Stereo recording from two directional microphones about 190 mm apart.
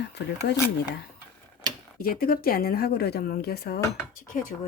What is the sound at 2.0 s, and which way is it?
Speech, 50° left (ahead or behind).